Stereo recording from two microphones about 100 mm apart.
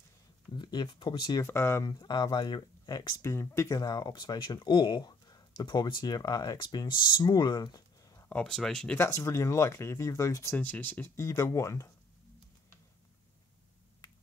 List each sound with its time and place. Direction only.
0.5 s speech: 45° left (ahead or behind)
1.4 s speech: 25° left (ahead or behind)
1.9 s speech: 45° left (ahead or behind)
3.2 s speech: 30° left (ahead or behind)
8.3 s speech: 10° left (ahead or behind)
8.9 s speech: 30° left (ahead or behind)
10.5 s speech: 20° left (ahead or behind)
11.2 s speech: 30° left (ahead or behind)